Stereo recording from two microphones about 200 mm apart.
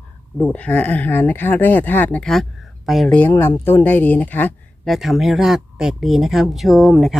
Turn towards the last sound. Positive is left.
turn(degrees=0)  # may be behind; listen again after turning